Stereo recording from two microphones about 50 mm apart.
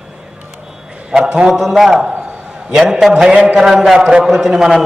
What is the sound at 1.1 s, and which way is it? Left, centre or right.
Speech, centre.